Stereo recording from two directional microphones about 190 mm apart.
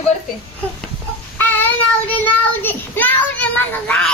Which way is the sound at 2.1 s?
10° left (ahead or behind).